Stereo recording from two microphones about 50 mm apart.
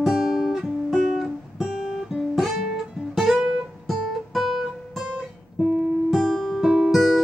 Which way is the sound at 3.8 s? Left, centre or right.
Centre.